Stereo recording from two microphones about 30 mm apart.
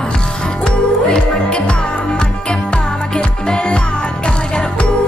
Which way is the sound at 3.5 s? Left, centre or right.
Left.